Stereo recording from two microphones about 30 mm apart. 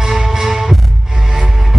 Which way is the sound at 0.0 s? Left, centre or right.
Centre.